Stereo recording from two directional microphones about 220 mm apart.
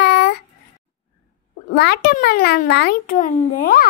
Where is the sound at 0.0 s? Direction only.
50° left (ahead or behind).